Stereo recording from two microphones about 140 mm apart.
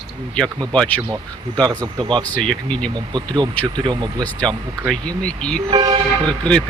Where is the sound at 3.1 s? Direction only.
30° right (ahead or behind).